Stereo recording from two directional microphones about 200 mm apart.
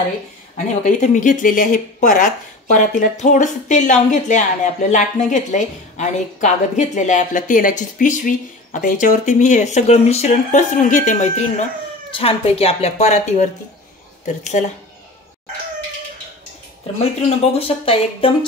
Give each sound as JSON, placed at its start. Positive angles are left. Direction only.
{"t": 0.8, "sound": "a woman's voice", "side_deg": 40}
{"t": 17.0, "sound": "speech", "side_deg": 30}